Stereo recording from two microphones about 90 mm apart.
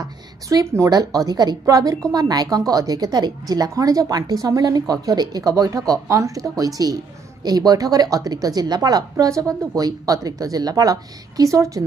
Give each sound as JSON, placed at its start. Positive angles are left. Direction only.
{"t": 0.0, "sound": "a woman's voice", "side_deg": -40}
{"t": 9.1, "sound": "speech", "side_deg": -35}